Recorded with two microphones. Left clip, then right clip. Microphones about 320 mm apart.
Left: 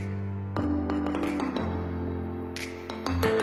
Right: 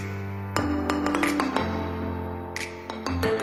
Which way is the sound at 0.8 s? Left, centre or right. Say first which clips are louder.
Right 5 dB; right.